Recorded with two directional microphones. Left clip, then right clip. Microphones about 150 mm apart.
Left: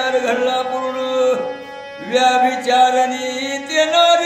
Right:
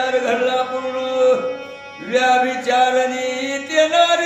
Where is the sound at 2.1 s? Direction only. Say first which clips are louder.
Left 2 dB; 30° left (ahead or behind).